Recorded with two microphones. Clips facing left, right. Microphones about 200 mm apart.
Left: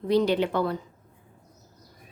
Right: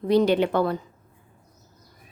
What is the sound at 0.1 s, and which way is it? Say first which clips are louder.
Speech: right 3 dB; 55° right (ahead or behind).